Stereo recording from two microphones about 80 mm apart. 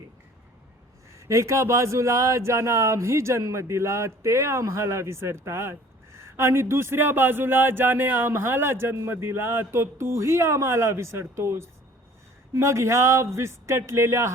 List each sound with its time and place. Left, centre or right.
1.3 s speech: right